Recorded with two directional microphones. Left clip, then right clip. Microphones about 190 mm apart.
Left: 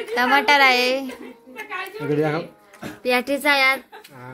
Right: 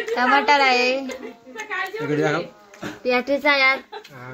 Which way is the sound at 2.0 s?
25° left (ahead or behind).